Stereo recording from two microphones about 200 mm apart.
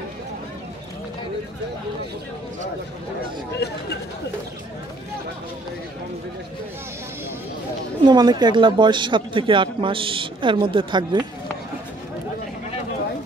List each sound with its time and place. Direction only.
8.0 s speech: 20° right (ahead or behind)